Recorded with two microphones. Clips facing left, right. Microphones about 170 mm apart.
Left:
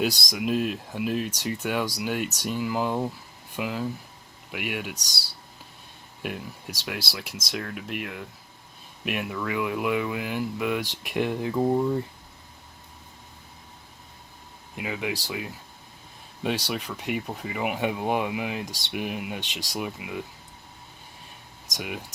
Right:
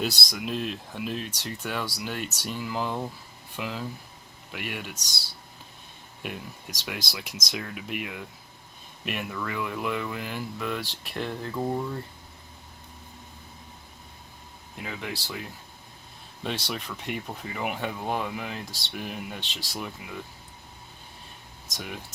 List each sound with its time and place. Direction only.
0.0 s speech: 10° left (ahead or behind)
6.2 s speech: centre (ahead or behind)
14.8 s speech: 10° left (ahead or behind)
21.7 s speech: 5° left (ahead or behind)